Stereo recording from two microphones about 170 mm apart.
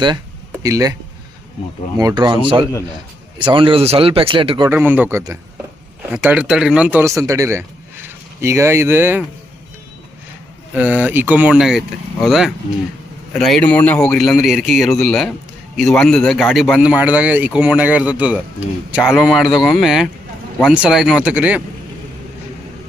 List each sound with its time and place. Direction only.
0.6 s speech: 20° right (ahead or behind)
2.0 s speech: 20° right (ahead or behind)
4.7 s speech: 10° right (ahead or behind)
6.1 s speech: 5° right (ahead or behind)
10.8 s speech: 10° right (ahead or behind)